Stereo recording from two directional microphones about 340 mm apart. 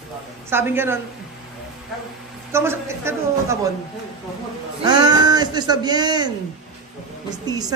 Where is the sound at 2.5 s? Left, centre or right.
Centre.